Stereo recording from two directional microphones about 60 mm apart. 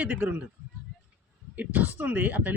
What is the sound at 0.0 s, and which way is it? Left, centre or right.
Speech, right.